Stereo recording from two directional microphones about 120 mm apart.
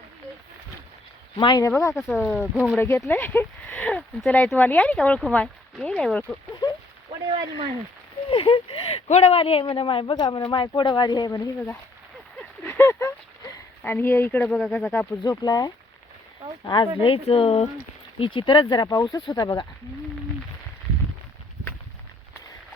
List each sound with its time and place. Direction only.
1.4 s speech: 40° left (ahead or behind)
1.6 s speech: 25° left (ahead or behind)
2.0 s speech: centre (ahead or behind)
2.7 s speech: 20° left (ahead or behind); by 6.2 s 5° left (ahead or behind)
8.3 s speech: 50° left (ahead or behind)
9.0 s speech: 65° left (ahead or behind); by 11.4 s 35° left (ahead or behind)
12.6 s a sound: 20° left (ahead or behind)
15.2 s speech: 30° left (ahead or behind)